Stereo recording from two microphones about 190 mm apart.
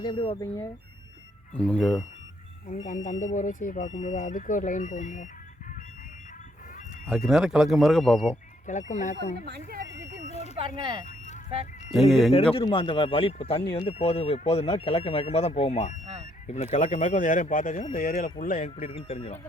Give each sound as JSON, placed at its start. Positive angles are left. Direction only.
{"t": 0.0, "sound": "a man's voice", "side_deg": 25}
{"t": 0.4, "sound": "speech", "side_deg": 15}
{"t": 2.6, "sound": "speech", "side_deg": 40}
{"t": 7.1, "sound": "speech", "side_deg": 0}
{"t": 8.6, "sound": "speech", "side_deg": 40}
{"t": 9.5, "sound": "speech", "side_deg": -50}
{"t": 10.2, "sound": "vehicle", "side_deg": 35}
{"t": 10.8, "sound": "speech", "side_deg": -25}
{"t": 11.9, "sound": "speech", "side_deg": 0}
{"t": 12.5, "sound": "a man's voice", "side_deg": 25}